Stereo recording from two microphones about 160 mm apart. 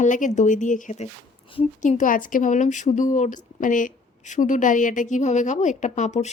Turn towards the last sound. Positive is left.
turn(degrees=45)  # may be behind; listen again after turning